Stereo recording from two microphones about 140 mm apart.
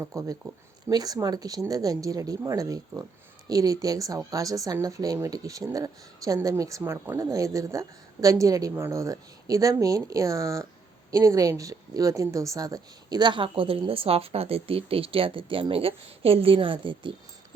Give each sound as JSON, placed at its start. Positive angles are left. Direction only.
{"t": 0.0, "sound": "speech", "side_deg": -20}